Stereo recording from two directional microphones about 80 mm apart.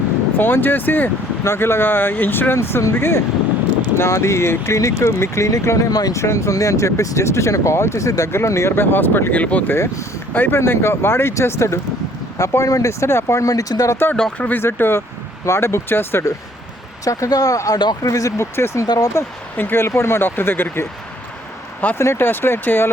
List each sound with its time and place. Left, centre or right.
0.3 s speech: left
6.2 s speech: left; by 9.7 s centre
9.7 s speech: left
14.3 s speech: centre
17.0 s speech: left
19.5 s speech: left
21.9 s speech: left